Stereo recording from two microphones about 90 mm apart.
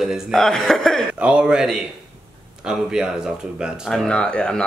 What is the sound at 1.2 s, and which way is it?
Speech, 15° right (ahead or behind).